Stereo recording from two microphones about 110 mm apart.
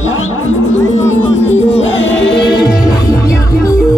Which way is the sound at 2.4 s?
45° left (ahead or behind).